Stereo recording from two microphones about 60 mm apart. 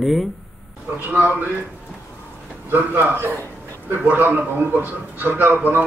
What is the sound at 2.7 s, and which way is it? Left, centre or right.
A man's voice, right.